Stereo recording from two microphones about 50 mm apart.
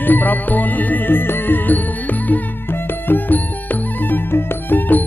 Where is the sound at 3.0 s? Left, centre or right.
Left.